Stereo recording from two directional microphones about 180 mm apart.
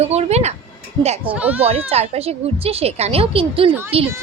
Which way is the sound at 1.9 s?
35° right (ahead or behind).